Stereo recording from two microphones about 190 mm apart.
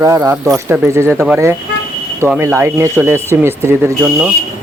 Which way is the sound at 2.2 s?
10° right (ahead or behind).